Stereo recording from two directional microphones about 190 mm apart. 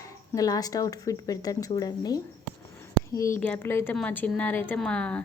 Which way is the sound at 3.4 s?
10° left (ahead or behind).